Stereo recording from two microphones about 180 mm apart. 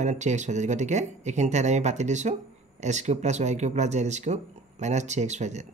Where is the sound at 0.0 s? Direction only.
40° right (ahead or behind).